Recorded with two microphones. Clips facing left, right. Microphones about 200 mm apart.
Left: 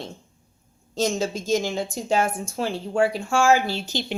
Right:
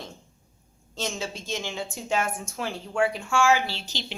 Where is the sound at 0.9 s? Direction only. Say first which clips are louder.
Left 8 dB; 40° left (ahead or behind).